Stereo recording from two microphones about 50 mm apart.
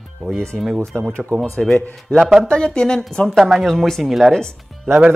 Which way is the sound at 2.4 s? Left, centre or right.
Centre.